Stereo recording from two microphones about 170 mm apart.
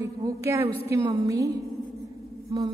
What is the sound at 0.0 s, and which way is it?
A woman's voice, 20° right (ahead or behind).